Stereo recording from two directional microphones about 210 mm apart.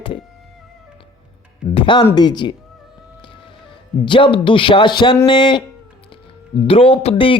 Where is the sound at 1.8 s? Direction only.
25° left (ahead or behind).